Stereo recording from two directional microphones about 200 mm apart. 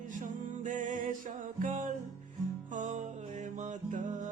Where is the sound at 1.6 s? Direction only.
40° right (ahead or behind).